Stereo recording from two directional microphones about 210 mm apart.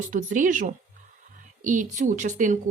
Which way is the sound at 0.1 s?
40° right (ahead or behind).